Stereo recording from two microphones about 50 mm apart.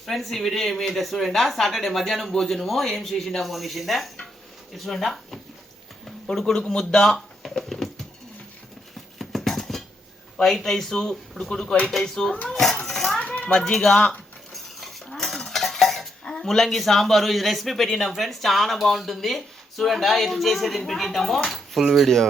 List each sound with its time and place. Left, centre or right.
0.0 s speech: centre
6.3 s speech: centre
9.1 s horse: centre
10.3 s speech: centre
13.1 s a sound: left
13.5 s speech: centre
14.5 s cutlery: centre
16.2 s speech: centre